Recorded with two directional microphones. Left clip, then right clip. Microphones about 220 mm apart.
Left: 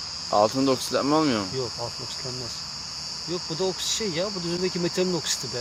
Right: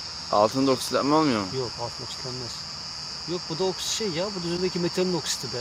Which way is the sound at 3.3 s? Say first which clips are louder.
Even; centre (ahead or behind).